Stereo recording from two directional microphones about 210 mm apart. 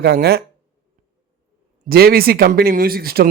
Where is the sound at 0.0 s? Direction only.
50° right (ahead or behind).